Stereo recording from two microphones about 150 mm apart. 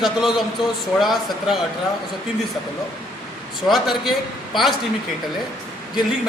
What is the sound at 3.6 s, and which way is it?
A man's voice, centre (ahead or behind).